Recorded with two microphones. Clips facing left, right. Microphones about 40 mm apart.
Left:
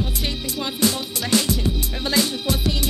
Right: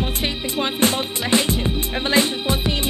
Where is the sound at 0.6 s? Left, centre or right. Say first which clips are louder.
Right 3 dB; right.